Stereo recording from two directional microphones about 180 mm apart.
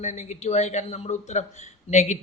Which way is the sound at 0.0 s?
40° left (ahead or behind).